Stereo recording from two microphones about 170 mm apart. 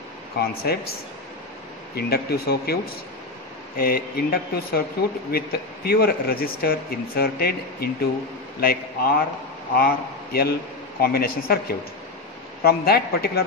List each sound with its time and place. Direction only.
0.7 s speech: 65° left (ahead or behind)
2.0 s a man's voice: 65° left (ahead or behind)